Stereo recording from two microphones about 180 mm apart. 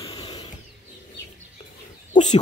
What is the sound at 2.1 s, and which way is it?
Chicken, 40° left (ahead or behind).